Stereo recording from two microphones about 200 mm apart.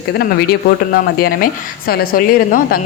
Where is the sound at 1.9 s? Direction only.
45° left (ahead or behind).